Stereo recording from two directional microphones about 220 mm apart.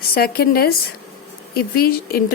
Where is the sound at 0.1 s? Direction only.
45° left (ahead or behind).